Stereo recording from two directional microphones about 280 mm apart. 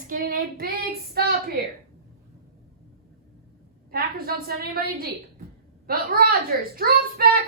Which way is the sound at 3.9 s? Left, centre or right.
Right.